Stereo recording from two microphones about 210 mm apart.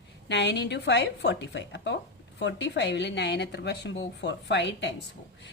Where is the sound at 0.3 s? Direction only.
55° left (ahead or behind).